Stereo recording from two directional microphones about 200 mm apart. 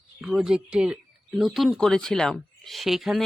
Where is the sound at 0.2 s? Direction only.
5° right (ahead or behind).